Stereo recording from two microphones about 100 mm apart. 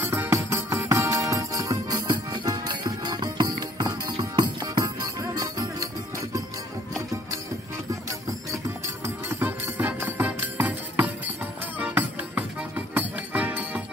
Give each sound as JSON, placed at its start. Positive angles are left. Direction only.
{"t": 0.1, "sound": "music", "side_deg": -25}
{"t": 7.9, "sound": "music", "side_deg": -35}